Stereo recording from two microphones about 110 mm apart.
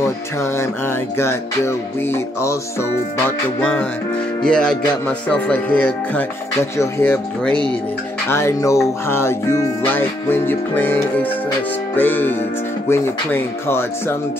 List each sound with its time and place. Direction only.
0.0 s music: 25° left (ahead or behind)
4.4 s music: 5° left (ahead or behind)
8.3 s music: 25° left (ahead or behind)
12.0 s music: 15° left (ahead or behind)